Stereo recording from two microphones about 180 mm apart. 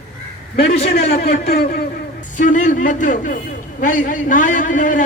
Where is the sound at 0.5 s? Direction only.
35° left (ahead or behind).